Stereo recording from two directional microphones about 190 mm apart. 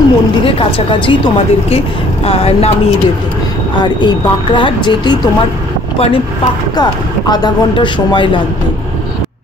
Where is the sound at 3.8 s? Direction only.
25° left (ahead or behind).